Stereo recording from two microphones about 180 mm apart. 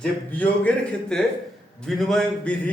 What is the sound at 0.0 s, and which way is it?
A man's voice, 10° left (ahead or behind).